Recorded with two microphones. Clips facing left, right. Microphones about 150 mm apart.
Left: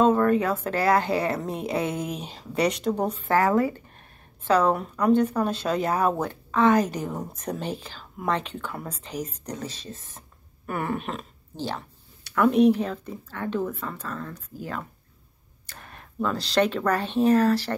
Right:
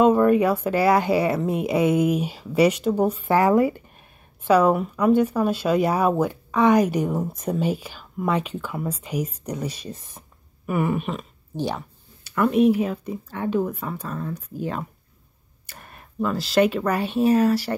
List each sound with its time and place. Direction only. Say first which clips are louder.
0.0 s a sound: right 4 dB; 15° right (ahead or behind)
0.7 s a woman's voice: right 1 dB; 10° right (ahead or behind)
11.5 s speech: right 5 dB; 15° right (ahead or behind)
12.4 s a woman's voice: right 1 dB; 5° right (ahead or behind); by 14.9 s 20° right (ahead or behind)
15.6 s speech: even; 10° right (ahead or behind)